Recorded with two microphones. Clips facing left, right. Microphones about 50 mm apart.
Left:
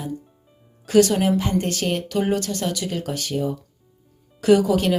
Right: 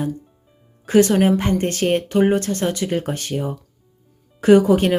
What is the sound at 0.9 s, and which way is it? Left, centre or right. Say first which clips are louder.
Speech: right 2 dB; right.